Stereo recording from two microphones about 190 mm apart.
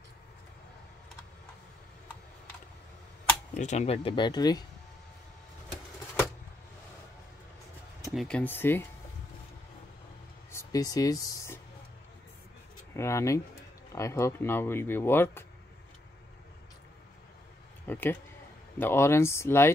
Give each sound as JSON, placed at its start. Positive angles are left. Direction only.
{"t": 3.5, "sound": "speech", "side_deg": 40}
{"t": 8.1, "sound": "speech", "side_deg": 0}
{"t": 10.5, "sound": "speech", "side_deg": 15}
{"t": 12.9, "sound": "speech", "side_deg": 15}
{"t": 17.8, "sound": "speech", "side_deg": 10}